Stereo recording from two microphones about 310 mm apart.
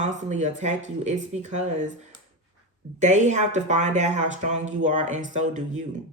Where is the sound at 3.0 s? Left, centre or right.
Right.